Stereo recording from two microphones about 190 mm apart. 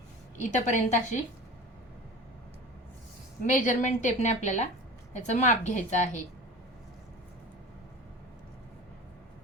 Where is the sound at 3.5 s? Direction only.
40° left (ahead or behind).